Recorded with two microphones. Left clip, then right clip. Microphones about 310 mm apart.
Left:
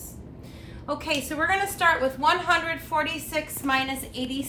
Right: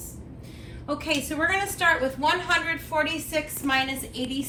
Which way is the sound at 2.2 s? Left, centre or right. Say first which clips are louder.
Left 1 dB; centre.